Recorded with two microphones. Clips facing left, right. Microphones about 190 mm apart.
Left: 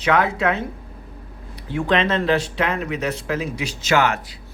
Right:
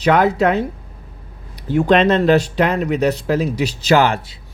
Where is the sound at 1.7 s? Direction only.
40° right (ahead or behind).